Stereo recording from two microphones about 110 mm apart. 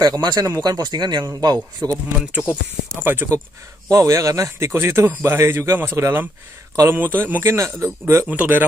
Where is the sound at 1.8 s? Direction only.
30° right (ahead or behind).